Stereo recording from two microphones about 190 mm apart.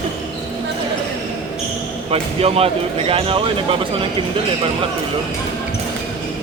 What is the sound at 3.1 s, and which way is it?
Speech, 30° right (ahead or behind).